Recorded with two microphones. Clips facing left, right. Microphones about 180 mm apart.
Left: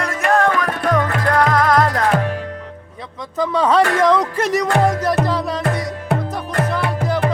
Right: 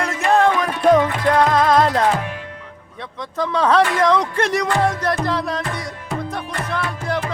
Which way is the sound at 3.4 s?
Centre (ahead or behind).